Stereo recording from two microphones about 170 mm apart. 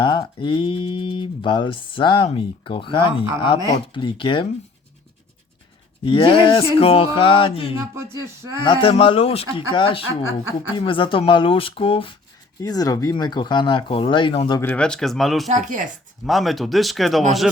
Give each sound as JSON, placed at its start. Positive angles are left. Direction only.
{"t": 0.0, "sound": "speech", "side_deg": 25}
{"t": 6.1, "sound": "speech", "side_deg": 30}
{"t": 7.8, "sound": "speech", "side_deg": -15}
{"t": 8.6, "sound": "speech", "side_deg": 30}
{"t": 12.6, "sound": "speech", "side_deg": 20}
{"t": 14.6, "sound": "speech", "side_deg": 10}
{"t": 15.4, "sound": "speech", "side_deg": -45}
{"t": 16.2, "sound": "speech", "side_deg": 0}